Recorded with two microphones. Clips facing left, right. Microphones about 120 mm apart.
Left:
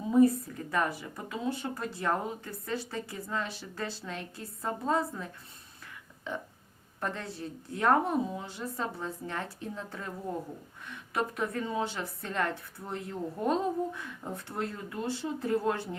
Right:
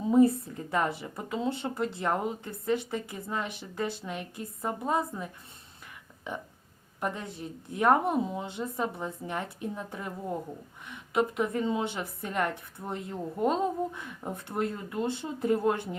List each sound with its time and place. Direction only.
0.1 s a woman's voice: 25° right (ahead or behind)